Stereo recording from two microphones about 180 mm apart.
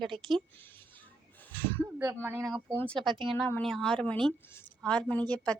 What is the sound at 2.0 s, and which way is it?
Speech, 15° right (ahead or behind).